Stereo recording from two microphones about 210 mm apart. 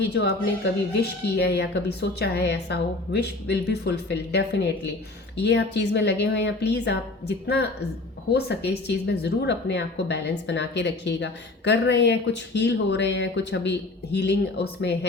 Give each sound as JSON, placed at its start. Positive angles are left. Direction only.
{"t": 0.0, "sound": "speech", "side_deg": 50}